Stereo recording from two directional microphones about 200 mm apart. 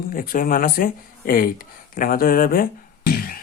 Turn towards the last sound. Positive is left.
turn(degrees=50)  # may be behind; listen again after turning